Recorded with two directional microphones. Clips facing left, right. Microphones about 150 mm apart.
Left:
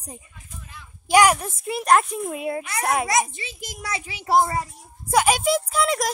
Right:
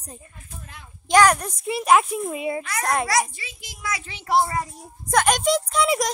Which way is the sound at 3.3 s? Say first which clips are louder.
Left 4 dB; 25° left (ahead or behind).